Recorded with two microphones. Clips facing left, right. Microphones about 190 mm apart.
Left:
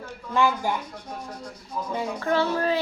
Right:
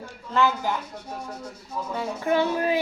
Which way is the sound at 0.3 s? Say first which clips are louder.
Even; 10° left (ahead or behind).